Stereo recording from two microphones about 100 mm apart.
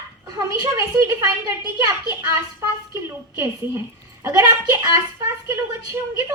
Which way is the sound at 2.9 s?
30° right (ahead or behind).